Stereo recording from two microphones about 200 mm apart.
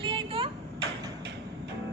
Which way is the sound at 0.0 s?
25° right (ahead or behind).